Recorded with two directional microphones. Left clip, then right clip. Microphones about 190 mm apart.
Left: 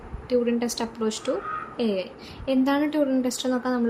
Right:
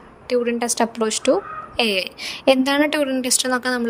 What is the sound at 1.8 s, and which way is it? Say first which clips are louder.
A woman's voice: right 9 dB; 55° right (ahead or behind).